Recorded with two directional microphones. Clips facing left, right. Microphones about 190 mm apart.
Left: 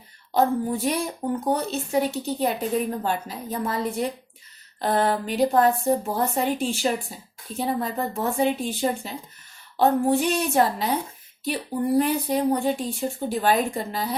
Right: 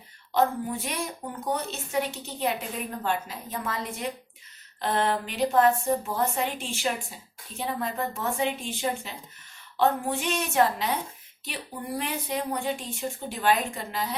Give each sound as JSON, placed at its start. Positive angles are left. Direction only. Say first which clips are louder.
{"t": 0.3, "sound": "speech", "louder": "left 4 dB", "side_deg": 35}
{"t": 11.9, "sound": "speech", "louder": "left 7 dB", "side_deg": 40}